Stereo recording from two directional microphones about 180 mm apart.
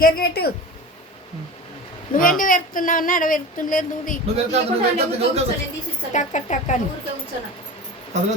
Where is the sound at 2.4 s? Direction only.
50° left (ahead or behind).